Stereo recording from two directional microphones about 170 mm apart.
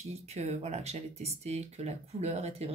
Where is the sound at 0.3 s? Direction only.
40° right (ahead or behind).